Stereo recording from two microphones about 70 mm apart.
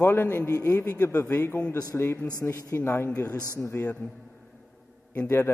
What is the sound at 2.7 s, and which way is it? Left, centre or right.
A man's voice, left.